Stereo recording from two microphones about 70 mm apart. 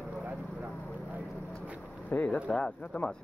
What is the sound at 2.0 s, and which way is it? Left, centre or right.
Speech, left.